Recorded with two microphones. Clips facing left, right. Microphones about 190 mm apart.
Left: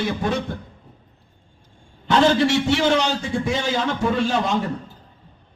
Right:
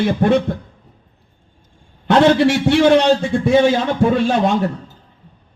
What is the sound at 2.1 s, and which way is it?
A man's voice, 60° right (ahead or behind).